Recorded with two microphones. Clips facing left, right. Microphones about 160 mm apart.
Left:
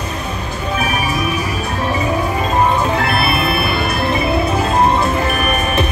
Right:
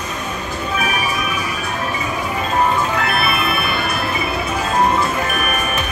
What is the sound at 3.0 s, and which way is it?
Music, 30° left (ahead or behind).